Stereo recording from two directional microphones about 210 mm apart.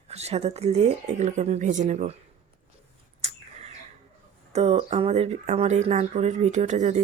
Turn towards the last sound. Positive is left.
turn(degrees=-35)  # may be behind; listen again after turning